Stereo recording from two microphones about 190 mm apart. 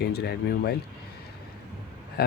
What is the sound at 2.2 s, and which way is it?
Speech, 55° left (ahead or behind).